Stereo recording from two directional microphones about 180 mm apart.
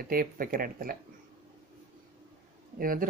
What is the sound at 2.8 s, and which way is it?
Speech, 50° right (ahead or behind).